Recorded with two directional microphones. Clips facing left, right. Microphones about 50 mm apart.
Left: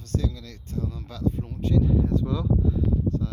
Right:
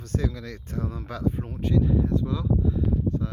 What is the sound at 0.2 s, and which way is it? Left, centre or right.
Speech, right.